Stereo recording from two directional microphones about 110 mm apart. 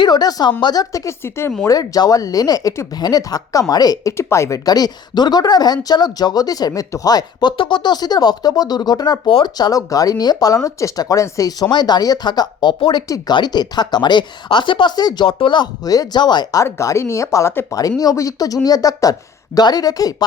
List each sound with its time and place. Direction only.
0.0 s speech: 40° left (ahead or behind); by 1.5 s 20° left (ahead or behind)
1.6 s speech: 35° left (ahead or behind)
7.5 s speech: 50° left (ahead or behind); by 11.5 s 30° left (ahead or behind)
11.6 s speech: 40° left (ahead or behind)
13.1 s speech: 30° left (ahead or behind)
16.6 s speech: 25° left (ahead or behind)
17.7 s speech: 35° left (ahead or behind)